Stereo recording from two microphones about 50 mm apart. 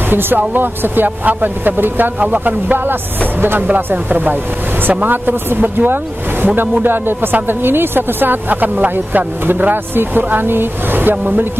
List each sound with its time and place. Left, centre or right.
0.1 s speech: right